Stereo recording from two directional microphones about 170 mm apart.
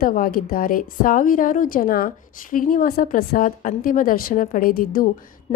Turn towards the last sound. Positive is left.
turn(degrees=40)  # may be behind; listen again after turning